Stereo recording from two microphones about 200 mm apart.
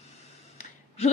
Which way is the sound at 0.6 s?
30° left (ahead or behind).